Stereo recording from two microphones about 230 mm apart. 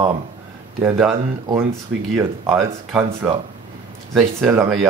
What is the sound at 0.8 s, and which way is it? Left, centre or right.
Speech, centre.